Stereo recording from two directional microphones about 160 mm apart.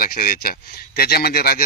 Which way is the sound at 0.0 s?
65° left (ahead or behind).